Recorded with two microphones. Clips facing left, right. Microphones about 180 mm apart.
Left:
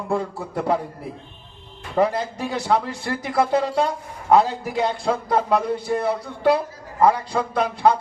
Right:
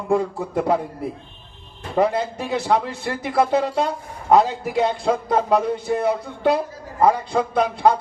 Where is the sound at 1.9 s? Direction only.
10° right (ahead or behind).